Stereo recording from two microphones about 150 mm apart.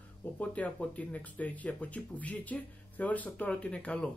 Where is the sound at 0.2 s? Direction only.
10° left (ahead or behind).